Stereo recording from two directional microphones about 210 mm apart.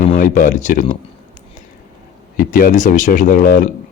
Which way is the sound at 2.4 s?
40° left (ahead or behind).